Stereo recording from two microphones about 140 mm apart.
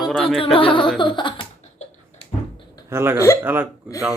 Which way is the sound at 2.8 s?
15° right (ahead or behind).